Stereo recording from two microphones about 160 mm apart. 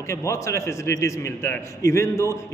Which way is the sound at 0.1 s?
20° left (ahead or behind).